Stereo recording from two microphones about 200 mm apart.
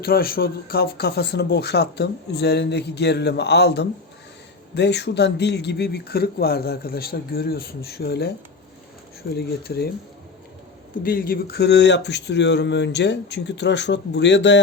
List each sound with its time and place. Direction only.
0.0 s speech: 50° left (ahead or behind)
9.3 s speech: 50° left (ahead or behind)
11.0 s speech: 45° left (ahead or behind); by 14.6 s 60° left (ahead or behind)